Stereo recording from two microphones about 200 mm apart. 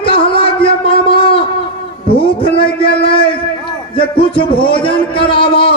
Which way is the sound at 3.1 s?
25° left (ahead or behind).